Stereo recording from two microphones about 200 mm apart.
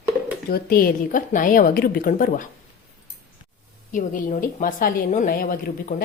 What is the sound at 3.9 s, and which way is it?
A woman's voice, 40° left (ahead or behind).